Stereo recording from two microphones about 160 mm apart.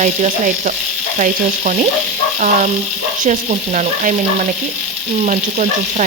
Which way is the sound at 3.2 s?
50° right (ahead or behind).